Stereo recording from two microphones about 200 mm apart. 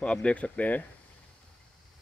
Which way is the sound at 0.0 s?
5° left (ahead or behind).